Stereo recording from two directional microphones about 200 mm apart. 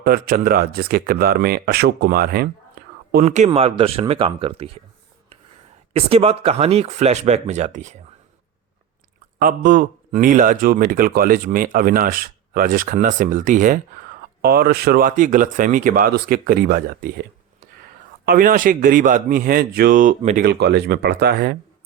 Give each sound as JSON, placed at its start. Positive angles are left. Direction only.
{"t": 0.0, "sound": "a man's voice", "side_deg": -45}
{"t": 5.9, "sound": "speech", "side_deg": -30}
{"t": 9.4, "sound": "a man's voice", "side_deg": -45}
{"t": 18.3, "sound": "a man's voice", "side_deg": -45}